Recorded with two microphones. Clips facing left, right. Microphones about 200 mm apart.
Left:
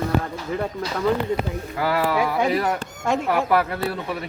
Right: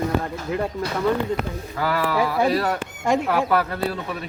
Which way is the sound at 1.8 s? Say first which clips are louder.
Left 1 dB; 25° left (ahead or behind).